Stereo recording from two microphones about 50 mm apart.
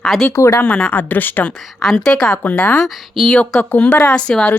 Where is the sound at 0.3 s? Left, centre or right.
Left.